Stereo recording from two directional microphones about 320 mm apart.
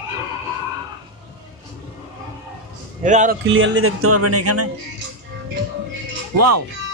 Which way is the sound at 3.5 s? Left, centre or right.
Right.